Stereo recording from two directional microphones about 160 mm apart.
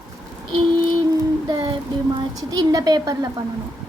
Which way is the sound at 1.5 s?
30° right (ahead or behind).